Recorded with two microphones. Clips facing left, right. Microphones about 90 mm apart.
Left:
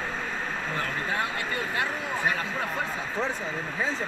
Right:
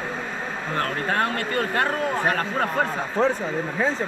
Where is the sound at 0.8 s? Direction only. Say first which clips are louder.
Right 7 dB; 55° right (ahead or behind).